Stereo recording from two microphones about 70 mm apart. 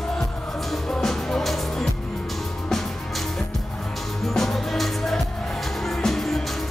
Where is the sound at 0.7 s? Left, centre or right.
Centre.